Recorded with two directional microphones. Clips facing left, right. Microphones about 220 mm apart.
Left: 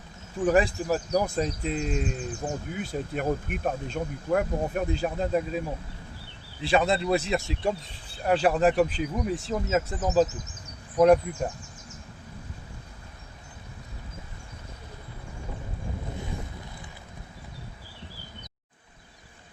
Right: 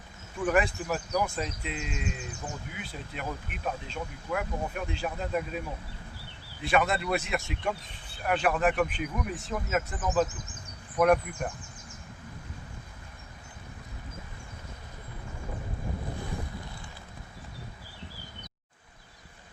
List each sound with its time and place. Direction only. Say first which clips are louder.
0.3 s speech: left 4 dB; 35° left (ahead or behind)